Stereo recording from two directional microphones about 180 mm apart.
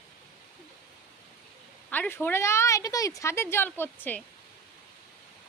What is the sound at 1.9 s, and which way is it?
A woman's voice, 10° left (ahead or behind).